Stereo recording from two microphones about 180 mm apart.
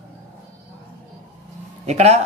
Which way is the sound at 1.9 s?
40° right (ahead or behind).